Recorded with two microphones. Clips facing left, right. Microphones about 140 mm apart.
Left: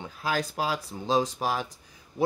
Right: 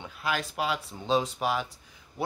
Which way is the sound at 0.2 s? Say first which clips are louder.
Left 2 dB; 35° left (ahead or behind).